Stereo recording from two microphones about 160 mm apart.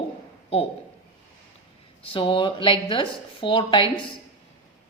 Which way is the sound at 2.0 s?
35° left (ahead or behind).